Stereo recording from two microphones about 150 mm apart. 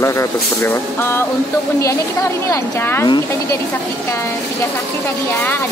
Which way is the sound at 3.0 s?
30° left (ahead or behind).